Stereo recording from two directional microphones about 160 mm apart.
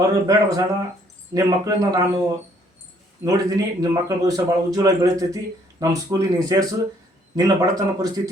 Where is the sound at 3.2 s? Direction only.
20° right (ahead or behind).